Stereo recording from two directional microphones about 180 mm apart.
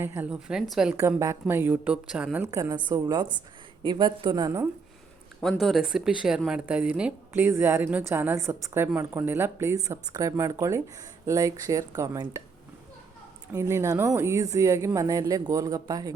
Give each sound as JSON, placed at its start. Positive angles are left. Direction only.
{"t": 0.0, "sound": "a woman's voice", "side_deg": -10}
{"t": 0.9, "sound": "a woman's voice", "side_deg": -15}
{"t": 5.4, "sound": "speech", "side_deg": 0}
{"t": 13.5, "sound": "speech", "side_deg": -15}